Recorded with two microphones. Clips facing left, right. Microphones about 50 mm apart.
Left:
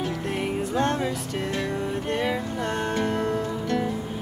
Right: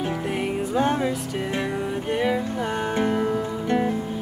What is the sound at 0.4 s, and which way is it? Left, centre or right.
Music, centre.